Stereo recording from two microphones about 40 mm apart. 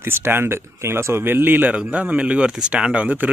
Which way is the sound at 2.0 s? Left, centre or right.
Right.